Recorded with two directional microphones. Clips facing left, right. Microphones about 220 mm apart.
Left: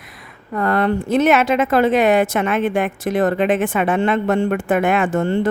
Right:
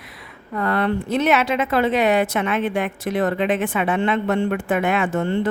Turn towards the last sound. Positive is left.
turn(degrees=45)  # may be behind; listen again after turning